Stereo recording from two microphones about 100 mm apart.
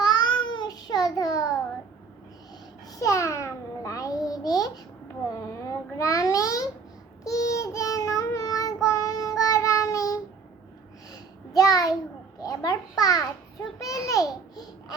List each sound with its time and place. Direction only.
0.0 s a sound: 45° left (ahead or behind)
2.9 s babbling: 35° left (ahead or behind)
7.3 s child singing: 35° left (ahead or behind)
12.4 s babbling: 35° left (ahead or behind)